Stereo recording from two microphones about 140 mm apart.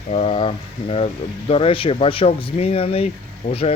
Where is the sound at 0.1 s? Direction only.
50° left (ahead or behind).